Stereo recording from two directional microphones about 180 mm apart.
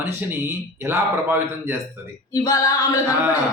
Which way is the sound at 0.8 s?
15° right (ahead or behind).